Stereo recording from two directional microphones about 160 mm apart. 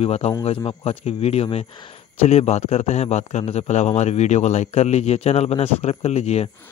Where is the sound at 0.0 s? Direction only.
40° left (ahead or behind).